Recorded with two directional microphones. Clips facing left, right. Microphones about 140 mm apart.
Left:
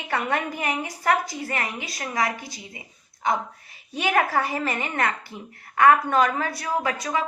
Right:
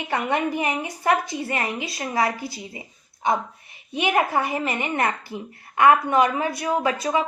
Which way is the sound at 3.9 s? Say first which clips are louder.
Right 1 dB; 20° right (ahead or behind).